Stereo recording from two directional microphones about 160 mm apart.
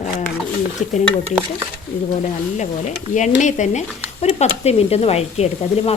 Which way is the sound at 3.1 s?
50° left (ahead or behind).